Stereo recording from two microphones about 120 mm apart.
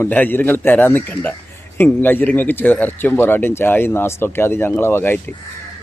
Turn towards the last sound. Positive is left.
turn(degrees=20)  # may be behind; listen again after turning